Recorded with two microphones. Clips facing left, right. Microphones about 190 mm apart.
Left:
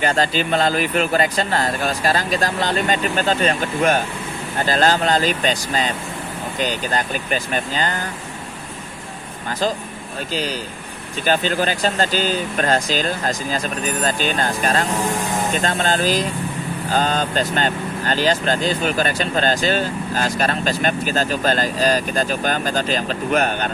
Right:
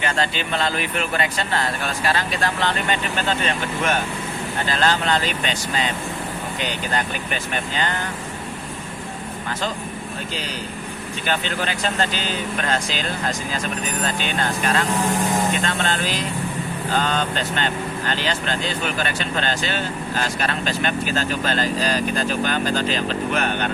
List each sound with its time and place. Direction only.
0.0 s speech: 40° left (ahead or behind)
11.3 s speech: 40° left (ahead or behind)